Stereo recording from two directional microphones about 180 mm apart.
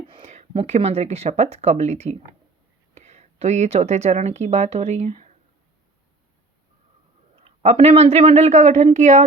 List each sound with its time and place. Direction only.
0.1 s speech: 35° right (ahead or behind)
7.4 s speech: 35° right (ahead or behind)